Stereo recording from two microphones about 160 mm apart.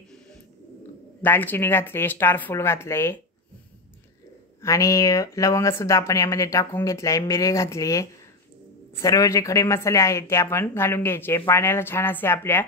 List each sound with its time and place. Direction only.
1.2 s speech: 10° left (ahead or behind)
4.6 s speech: 20° left (ahead or behind)